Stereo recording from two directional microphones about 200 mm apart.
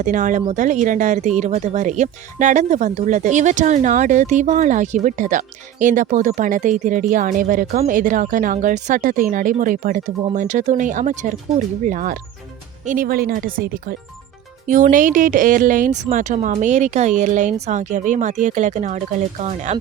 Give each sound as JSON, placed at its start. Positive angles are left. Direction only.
{"t": 0.0, "sound": "speech", "side_deg": -40}